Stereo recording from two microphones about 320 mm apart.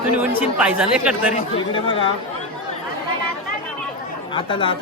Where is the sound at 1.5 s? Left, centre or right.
Centre.